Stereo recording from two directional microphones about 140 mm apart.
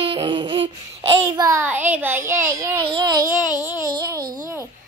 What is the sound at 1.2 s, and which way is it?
Speech, 25° right (ahead or behind).